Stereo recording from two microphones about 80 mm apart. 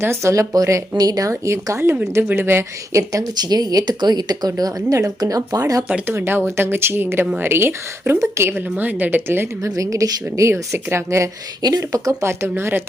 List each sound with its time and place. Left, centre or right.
0.0 s a woman's voice: right
3.3 s speech: right
6.1 s a woman's voice: right
9.6 s speech: right
10.5 s speech: right
11.6 s speech: right
12.2 s speech: right